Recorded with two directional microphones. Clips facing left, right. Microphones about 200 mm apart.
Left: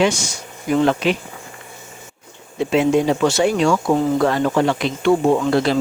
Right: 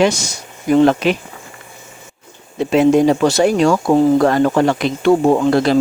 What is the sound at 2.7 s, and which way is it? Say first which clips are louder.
Speech: right 5 dB; 40° right (ahead or behind).